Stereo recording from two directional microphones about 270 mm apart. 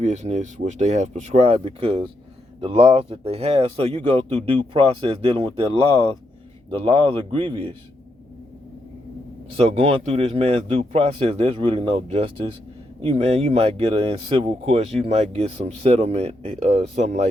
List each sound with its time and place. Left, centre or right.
0.0 s speech: right
9.6 s speech: right